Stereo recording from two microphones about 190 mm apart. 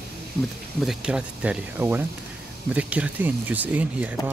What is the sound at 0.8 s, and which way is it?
Speech, 5° right (ahead or behind).